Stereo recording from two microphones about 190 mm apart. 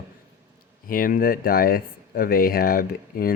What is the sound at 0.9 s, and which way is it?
Speech, 45° left (ahead or behind).